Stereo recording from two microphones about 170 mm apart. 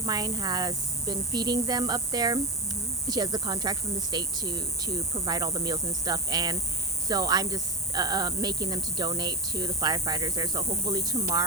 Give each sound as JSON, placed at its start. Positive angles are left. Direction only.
{"t": 0.0, "sound": "speech", "side_deg": -25}